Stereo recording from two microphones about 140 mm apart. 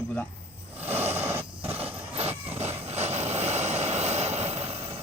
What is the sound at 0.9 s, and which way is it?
Vehicle, 15° right (ahead or behind).